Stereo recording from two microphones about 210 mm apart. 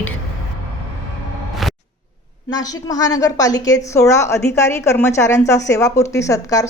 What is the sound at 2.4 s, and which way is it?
A woman's voice, 20° left (ahead or behind).